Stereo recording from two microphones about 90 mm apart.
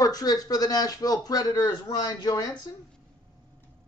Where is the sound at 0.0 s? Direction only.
45° left (ahead or behind).